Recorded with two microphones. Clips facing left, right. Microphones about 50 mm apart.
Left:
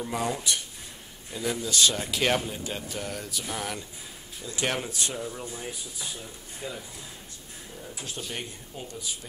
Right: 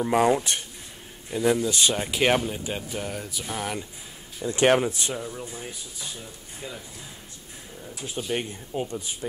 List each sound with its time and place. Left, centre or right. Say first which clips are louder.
0.1 s speech: right 9 dB; right
1.3 s speech: right 7 dB; right
4.5 s speech: right 10 dB; right
4.8 s speech: right 4 dB; centre
5.2 s speech: even; centre
8.0 s speech: right 6 dB; centre
8.3 s speech: right 8 dB; right